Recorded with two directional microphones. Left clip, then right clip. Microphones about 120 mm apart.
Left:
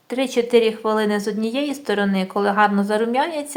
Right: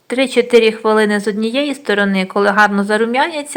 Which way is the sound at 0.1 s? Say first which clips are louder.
Right 6 dB; 20° right (ahead or behind).